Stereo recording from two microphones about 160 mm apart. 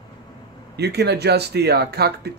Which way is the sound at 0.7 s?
90° right.